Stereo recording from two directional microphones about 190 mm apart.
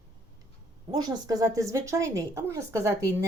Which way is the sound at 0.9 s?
20° right (ahead or behind).